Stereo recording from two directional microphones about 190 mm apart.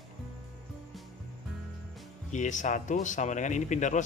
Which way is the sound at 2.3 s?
40° left (ahead or behind).